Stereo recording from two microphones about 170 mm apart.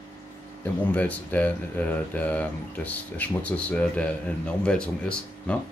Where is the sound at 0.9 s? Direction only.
10° left (ahead or behind).